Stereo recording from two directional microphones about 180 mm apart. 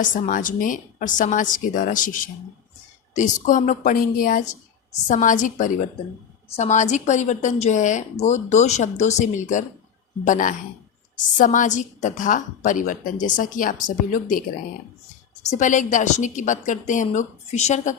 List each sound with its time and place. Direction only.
0.0 s a woman's voice: 45° left (ahead or behind)
15.4 s a woman's voice: 45° left (ahead or behind)